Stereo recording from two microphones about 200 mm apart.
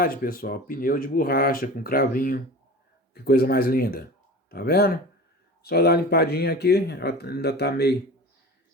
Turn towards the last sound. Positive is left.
turn(degrees=55)  # may be behind; listen again after turning